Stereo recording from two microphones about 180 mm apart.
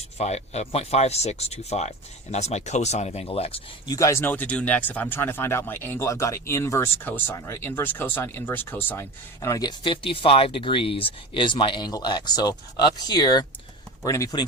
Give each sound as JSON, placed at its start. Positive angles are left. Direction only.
{"t": 0.2, "sound": "speech", "side_deg": 35}
{"t": 3.8, "sound": "speech", "side_deg": 20}